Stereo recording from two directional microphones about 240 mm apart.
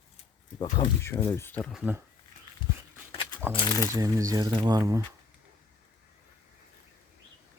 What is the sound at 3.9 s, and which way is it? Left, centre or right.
Speech, centre.